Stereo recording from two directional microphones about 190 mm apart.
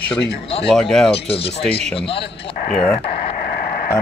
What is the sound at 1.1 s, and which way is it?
Speech, 30° left (ahead or behind).